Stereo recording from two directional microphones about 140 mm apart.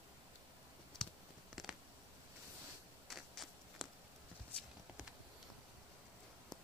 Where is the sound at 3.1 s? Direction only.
Centre (ahead or behind).